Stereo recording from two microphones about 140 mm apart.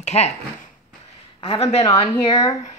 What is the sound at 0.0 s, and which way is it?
Speech, 55° left (ahead or behind).